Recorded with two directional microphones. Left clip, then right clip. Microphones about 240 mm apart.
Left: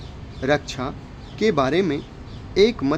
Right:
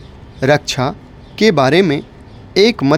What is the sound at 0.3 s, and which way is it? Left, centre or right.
Speech, right.